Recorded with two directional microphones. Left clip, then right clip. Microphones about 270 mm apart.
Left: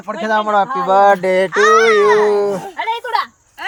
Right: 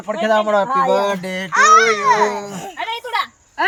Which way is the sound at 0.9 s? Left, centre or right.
Centre.